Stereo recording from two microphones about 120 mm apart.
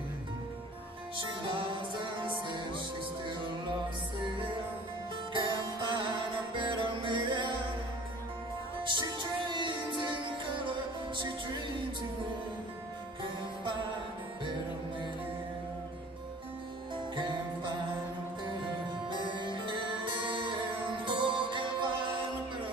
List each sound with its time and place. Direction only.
1.1 s music: 45° right (ahead or behind)
5.3 s music: 40° right (ahead or behind)
8.8 s music: 40° right (ahead or behind)
17.1 s music: 40° right (ahead or behind)
19.0 s music: 40° right (ahead or behind)